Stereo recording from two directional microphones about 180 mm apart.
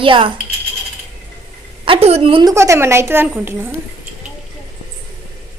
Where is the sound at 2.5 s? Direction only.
15° right (ahead or behind).